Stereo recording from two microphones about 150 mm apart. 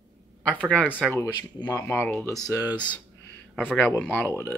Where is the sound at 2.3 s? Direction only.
25° left (ahead or behind).